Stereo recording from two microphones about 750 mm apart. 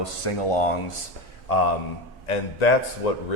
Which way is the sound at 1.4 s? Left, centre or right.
Left.